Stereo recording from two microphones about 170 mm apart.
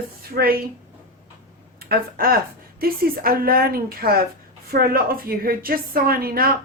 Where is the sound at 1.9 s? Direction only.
60° right (ahead or behind).